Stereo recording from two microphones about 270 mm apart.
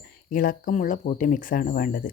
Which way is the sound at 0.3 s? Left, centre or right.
Left.